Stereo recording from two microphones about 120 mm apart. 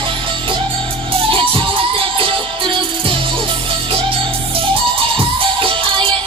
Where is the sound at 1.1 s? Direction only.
50° right (ahead or behind).